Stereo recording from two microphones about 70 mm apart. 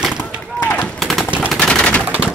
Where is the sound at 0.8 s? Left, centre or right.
Centre.